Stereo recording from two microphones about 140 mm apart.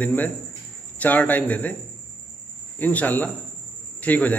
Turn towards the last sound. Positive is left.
turn(degrees=10)  # may be behind; listen again after turning